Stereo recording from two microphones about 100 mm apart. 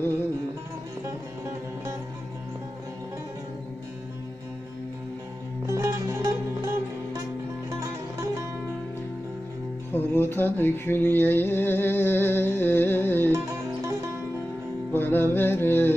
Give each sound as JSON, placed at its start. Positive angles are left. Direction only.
{"t": 5.7, "sound": "music", "side_deg": -35}
{"t": 9.9, "sound": "a sound", "side_deg": 20}
{"t": 13.3, "sound": "music", "side_deg": -35}
{"t": 14.9, "sound": "music", "side_deg": 20}